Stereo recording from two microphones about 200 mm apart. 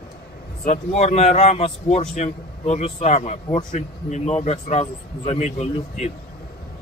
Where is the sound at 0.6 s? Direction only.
35° left (ahead or behind).